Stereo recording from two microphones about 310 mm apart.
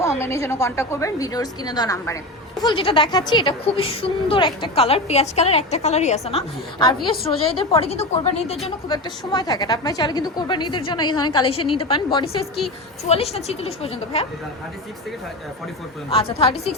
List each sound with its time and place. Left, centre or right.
0.0 s a woman's voice: centre
16.0 s a woman's voice: centre